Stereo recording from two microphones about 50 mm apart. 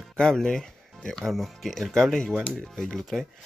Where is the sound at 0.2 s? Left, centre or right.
Centre.